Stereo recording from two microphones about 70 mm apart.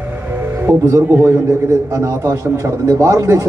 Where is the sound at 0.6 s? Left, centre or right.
Right.